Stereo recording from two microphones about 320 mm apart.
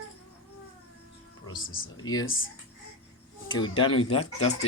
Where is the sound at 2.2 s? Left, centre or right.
Left.